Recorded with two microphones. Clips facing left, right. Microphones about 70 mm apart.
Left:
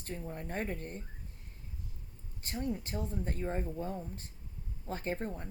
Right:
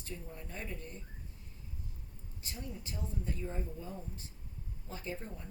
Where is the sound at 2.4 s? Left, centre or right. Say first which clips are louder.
Left 9 dB; left.